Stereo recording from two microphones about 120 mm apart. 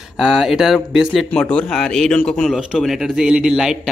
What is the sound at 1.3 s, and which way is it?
A man's voice, 10° left (ahead or behind).